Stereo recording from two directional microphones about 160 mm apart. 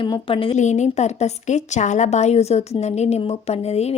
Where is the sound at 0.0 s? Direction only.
30° left (ahead or behind).